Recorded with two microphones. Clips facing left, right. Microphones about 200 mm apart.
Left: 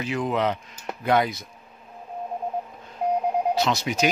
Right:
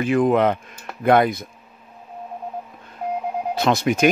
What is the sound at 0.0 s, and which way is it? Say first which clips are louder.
A man's voice: right 8 dB; 55° right (ahead or behind).